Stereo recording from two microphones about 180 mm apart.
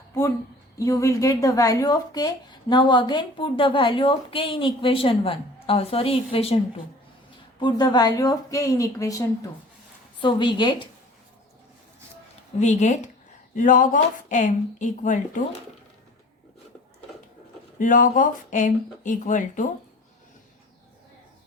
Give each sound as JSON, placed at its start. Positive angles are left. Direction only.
{"t": 0.9, "sound": "a woman's voice", "side_deg": 15}
{"t": 12.5, "sound": "speech", "side_deg": 40}
{"t": 17.7, "sound": "speech", "side_deg": 45}